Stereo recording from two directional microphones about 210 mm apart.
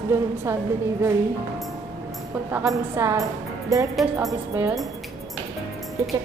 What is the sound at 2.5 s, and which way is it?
A woman's voice, 10° right (ahead or behind).